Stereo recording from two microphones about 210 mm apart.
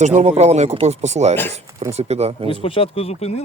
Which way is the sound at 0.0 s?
35° right (ahead or behind).